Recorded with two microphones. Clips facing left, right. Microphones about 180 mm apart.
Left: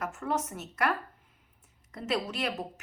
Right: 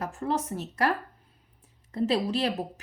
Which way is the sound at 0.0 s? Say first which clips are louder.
Right 3 dB; 30° right (ahead or behind).